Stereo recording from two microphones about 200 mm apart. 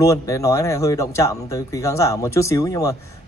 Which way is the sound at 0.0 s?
15° left (ahead or behind).